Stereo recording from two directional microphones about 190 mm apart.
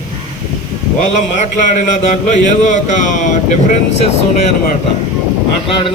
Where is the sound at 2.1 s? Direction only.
40° left (ahead or behind).